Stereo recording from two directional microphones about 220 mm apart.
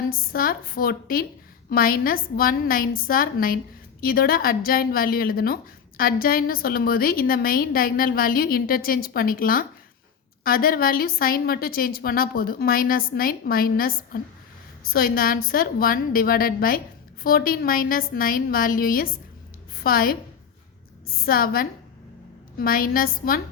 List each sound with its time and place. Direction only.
0.1 s a woman's voice: 40° left (ahead or behind)
21.2 s a woman's voice: 40° left (ahead or behind)